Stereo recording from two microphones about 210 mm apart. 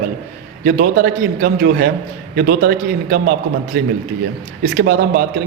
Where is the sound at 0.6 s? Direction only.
45° right (ahead or behind).